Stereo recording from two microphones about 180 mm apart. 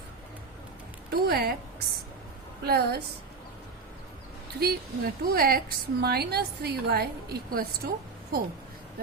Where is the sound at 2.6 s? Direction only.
60° right (ahead or behind).